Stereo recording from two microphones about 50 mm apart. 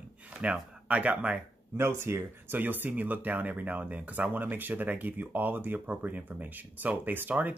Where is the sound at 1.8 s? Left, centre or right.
Right.